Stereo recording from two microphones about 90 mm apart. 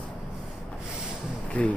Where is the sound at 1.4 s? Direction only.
15° left (ahead or behind).